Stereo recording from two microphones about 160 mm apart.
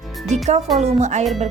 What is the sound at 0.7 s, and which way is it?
Speech, 45° right (ahead or behind).